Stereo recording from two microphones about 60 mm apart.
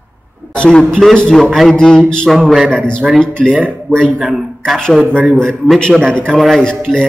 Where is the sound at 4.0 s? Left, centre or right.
Centre.